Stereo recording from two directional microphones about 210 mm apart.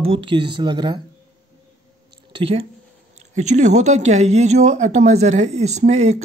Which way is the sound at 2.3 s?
25° right (ahead or behind).